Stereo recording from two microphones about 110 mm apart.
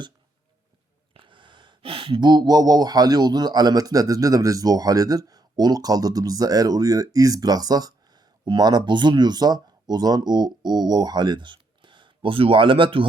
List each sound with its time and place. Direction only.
1.1 s speech: 50° right (ahead or behind)